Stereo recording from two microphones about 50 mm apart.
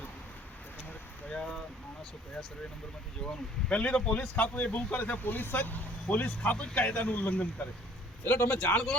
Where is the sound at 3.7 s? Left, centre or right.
Left.